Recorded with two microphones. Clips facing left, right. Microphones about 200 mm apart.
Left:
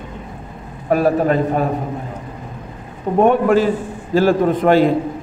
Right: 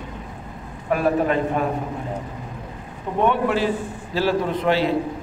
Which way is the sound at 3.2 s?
45° left (ahead or behind).